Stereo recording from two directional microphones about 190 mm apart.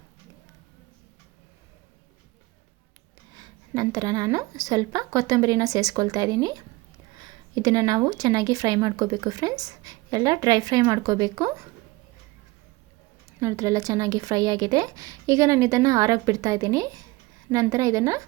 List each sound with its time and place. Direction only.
3.3 s speech: 20° right (ahead or behind)
13.4 s a woman's voice: 15° right (ahead or behind)